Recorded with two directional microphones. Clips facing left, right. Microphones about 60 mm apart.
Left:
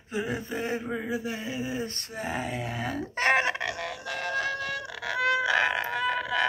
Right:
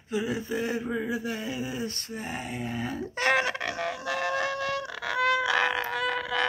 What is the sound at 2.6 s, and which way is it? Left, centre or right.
Speech, left.